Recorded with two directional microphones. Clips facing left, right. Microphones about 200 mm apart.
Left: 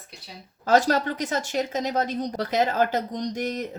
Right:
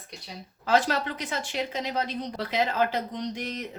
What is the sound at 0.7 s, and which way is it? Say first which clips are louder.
A woman's voice: left 4 dB; 45° left (ahead or behind).